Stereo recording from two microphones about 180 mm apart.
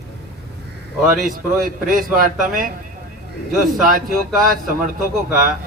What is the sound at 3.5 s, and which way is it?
Speech, centre (ahead or behind).